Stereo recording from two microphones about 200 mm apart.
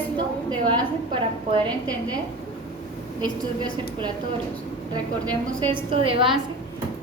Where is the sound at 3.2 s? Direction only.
20° right (ahead or behind).